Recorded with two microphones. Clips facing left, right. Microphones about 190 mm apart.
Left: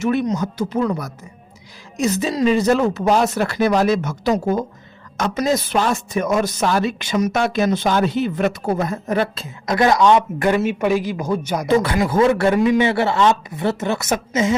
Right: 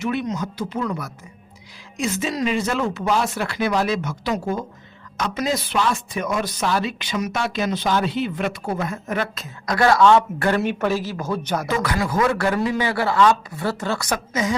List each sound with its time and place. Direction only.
0.0 s speech: 45° left (ahead or behind); by 11.7 s 15° left (ahead or behind)
11.7 s speech: 30° left (ahead or behind)